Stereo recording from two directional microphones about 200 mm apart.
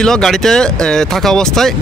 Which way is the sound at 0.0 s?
5° left (ahead or behind).